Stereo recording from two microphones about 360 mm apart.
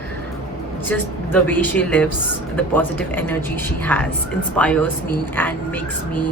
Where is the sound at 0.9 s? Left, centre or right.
Centre.